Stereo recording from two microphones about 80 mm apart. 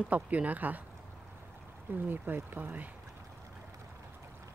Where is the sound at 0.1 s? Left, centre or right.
Centre.